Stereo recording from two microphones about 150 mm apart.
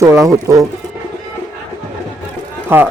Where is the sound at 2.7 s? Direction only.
15° right (ahead or behind).